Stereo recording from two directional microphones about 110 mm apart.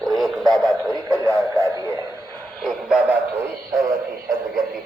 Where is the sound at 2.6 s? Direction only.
5° left (ahead or behind).